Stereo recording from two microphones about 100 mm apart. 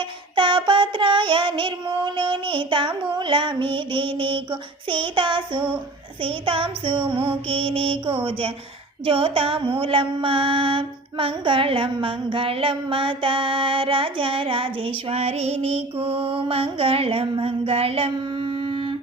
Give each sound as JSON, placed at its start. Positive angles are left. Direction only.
{"t": 0.3, "sound": "child singing", "side_deg": -55}
{"t": 3.2, "sound": "mantra", "side_deg": -55}